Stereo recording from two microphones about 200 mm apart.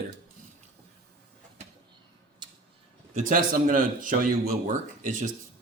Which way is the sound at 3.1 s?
40° right (ahead or behind).